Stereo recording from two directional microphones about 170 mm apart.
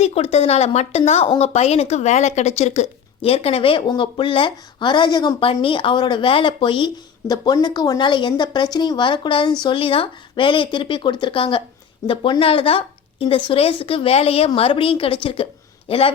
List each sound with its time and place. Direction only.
0.0 s speech: 35° left (ahead or behind)